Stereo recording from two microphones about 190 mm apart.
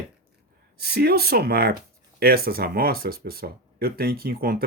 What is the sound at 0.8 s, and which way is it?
Speech, 55° right (ahead or behind).